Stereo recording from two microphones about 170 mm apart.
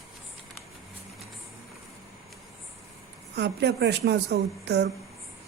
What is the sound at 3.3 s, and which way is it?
A woman's voice, 80° right.